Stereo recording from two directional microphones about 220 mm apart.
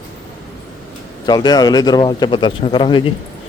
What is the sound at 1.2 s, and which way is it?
A man's voice, 15° left (ahead or behind).